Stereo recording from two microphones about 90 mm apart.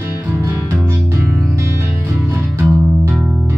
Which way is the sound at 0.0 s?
25° right (ahead or behind).